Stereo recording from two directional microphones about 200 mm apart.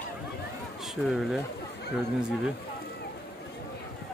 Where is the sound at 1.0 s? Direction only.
Centre (ahead or behind).